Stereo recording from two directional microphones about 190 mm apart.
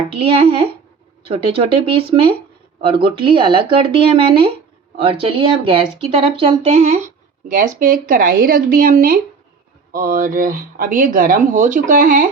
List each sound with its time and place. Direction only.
0.1 s speech: 30° right (ahead or behind)
7.4 s speech: 45° right (ahead or behind)